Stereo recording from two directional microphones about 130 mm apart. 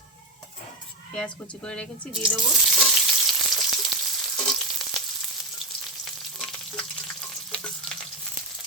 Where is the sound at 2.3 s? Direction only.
Centre (ahead or behind).